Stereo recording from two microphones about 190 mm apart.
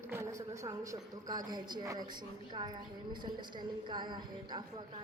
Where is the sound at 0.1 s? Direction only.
15° right (ahead or behind).